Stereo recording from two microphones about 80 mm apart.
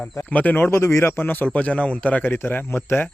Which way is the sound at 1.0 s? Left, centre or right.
Left.